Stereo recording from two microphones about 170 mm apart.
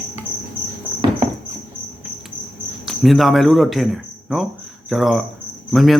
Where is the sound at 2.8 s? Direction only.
Centre (ahead or behind).